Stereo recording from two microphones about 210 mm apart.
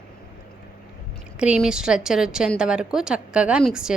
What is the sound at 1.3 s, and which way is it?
A woman's voice, 5° right (ahead or behind).